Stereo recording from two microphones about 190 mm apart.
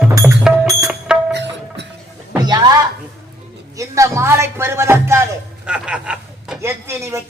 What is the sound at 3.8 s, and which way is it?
Music, 15° right (ahead or behind).